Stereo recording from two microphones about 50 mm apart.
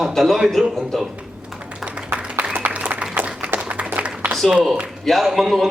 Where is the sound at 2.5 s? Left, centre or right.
Right.